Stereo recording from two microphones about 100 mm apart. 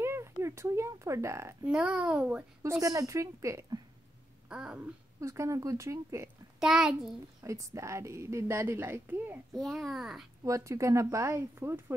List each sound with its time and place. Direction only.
0.0 s speech: 25° right (ahead or behind)
1.7 s a child's voice: 10° right (ahead or behind)
2.6 s speech: 30° right (ahead or behind)
4.5 s speech: 5° right (ahead or behind)
5.2 s speech: 30° right (ahead or behind)
6.6 s a child's voice: 5° right (ahead or behind)
7.4 s a woman's voice: 30° right (ahead or behind)
9.5 s a child's voice: centre (ahead or behind)
10.4 s speech: 30° right (ahead or behind)